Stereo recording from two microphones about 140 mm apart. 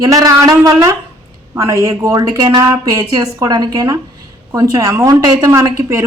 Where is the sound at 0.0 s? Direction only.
25° right (ahead or behind).